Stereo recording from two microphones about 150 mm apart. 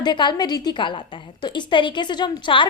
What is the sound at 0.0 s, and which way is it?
A woman's voice, 30° left (ahead or behind).